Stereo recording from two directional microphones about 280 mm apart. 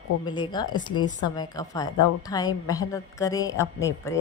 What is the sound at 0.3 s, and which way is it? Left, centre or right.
A woman's voice, centre.